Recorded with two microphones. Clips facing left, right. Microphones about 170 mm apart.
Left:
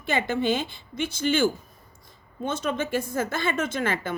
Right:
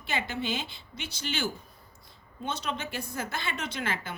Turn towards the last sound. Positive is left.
turn(degrees=50)  # may be behind; listen again after turning